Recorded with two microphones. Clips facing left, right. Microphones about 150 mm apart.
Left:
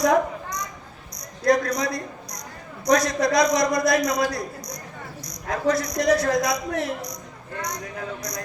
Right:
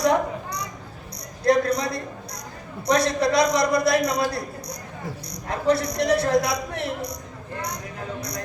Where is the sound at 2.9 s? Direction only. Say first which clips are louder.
Even; 30° right (ahead or behind).